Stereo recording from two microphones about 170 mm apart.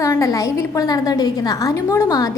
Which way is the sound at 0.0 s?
20° left (ahead or behind).